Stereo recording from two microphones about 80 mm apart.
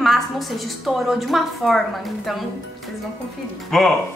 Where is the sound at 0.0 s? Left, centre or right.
Centre.